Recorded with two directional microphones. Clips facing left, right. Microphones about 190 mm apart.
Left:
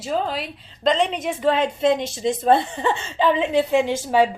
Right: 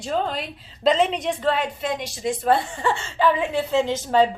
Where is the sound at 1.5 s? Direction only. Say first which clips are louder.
Left 6 dB; 25° left (ahead or behind).